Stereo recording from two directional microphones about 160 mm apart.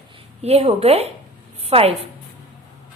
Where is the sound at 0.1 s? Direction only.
40° right (ahead or behind).